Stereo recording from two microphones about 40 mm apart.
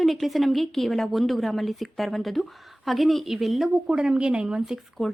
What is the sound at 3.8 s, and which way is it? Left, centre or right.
Speech, right.